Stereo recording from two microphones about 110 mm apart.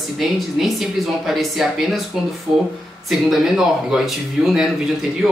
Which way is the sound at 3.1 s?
5° right (ahead or behind).